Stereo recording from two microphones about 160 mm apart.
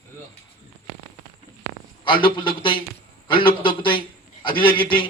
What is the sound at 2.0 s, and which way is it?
A man's voice, 30° left (ahead or behind).